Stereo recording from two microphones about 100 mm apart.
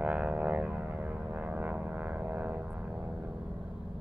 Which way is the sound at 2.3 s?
15° right (ahead or behind).